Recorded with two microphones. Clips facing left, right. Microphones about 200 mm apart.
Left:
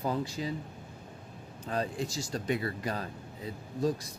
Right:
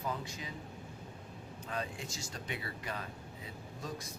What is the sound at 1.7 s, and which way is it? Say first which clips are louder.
Speech: left 8 dB; 35° left (ahead or behind).